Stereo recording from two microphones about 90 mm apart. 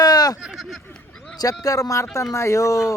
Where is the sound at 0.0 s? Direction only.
45° left (ahead or behind).